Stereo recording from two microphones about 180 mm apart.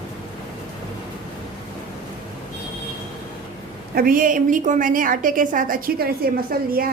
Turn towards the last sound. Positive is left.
turn(degrees=-55)  # may be behind; listen again after turning